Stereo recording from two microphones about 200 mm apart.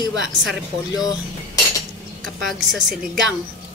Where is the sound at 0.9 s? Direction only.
20° left (ahead or behind).